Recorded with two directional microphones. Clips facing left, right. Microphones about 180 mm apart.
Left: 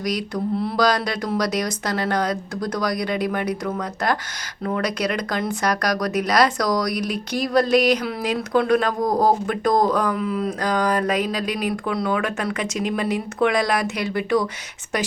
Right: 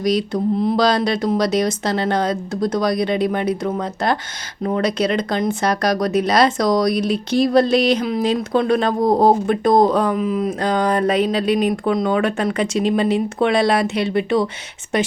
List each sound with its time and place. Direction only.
0.0 s speech: 25° right (ahead or behind)